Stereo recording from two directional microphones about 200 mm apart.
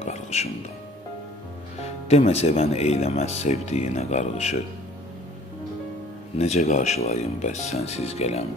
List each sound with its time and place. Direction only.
0.0 s music: 35° left (ahead or behind)
1.8 s speech: 35° left (ahead or behind)
6.3 s speech: 30° left (ahead or behind)